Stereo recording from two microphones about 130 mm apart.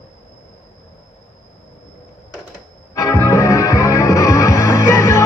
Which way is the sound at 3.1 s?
20° left (ahead or behind).